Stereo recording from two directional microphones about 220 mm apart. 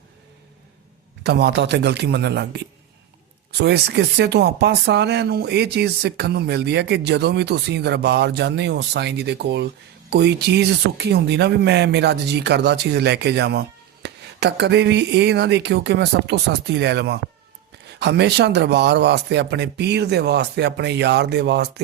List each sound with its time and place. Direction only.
1.2 s speech: 50° right (ahead or behind)
3.6 s speech: 50° right (ahead or behind)